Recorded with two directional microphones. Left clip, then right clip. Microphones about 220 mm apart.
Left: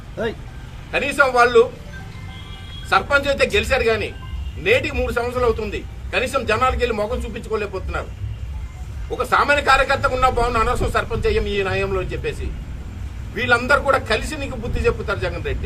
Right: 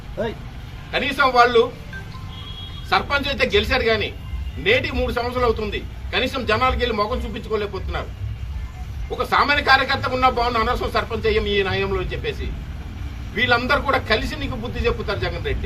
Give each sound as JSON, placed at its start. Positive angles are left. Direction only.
{"t": 0.9, "sound": "a man's voice", "side_deg": 5}
{"t": 2.9, "sound": "a man's voice", "side_deg": 5}
{"t": 9.1, "sound": "a man's voice", "side_deg": 5}
{"t": 13.3, "sound": "a man's voice", "side_deg": 5}